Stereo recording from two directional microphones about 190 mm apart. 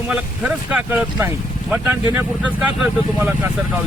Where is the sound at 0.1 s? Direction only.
5° right (ahead or behind).